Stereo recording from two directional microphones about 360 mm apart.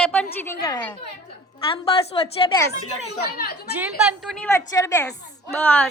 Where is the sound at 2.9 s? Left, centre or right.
Left.